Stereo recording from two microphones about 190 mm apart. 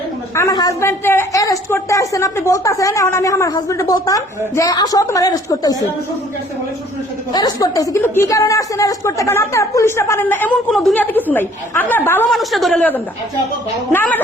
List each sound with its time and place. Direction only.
0.3 s a woman's voice: 20° left (ahead or behind)
7.3 s a woman's voice: 20° left (ahead or behind)
12.3 s a woman's voice: centre (ahead or behind)